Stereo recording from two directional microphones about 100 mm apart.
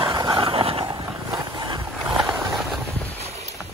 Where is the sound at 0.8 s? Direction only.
50° right (ahead or behind).